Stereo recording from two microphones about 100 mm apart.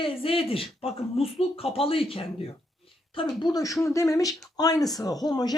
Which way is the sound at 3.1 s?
55° left (ahead or behind).